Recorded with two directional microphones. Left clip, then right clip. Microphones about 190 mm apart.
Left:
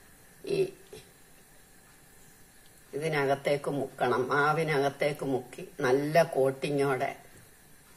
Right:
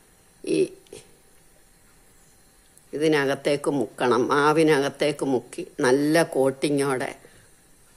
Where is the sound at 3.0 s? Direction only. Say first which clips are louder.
Right 7 dB; 55° right (ahead or behind).